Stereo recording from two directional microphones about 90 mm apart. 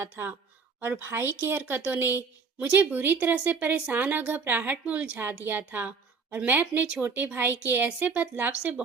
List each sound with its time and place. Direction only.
0.0 s speech: 25° right (ahead or behind)